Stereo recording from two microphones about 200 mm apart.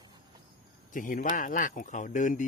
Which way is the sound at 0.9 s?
40° left (ahead or behind).